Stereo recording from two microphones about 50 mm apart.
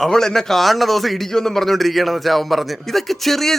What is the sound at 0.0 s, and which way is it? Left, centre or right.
A man's voice, centre.